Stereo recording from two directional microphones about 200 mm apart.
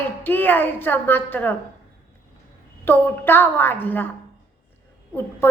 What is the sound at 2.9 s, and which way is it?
A woman's voice, 10° left (ahead or behind).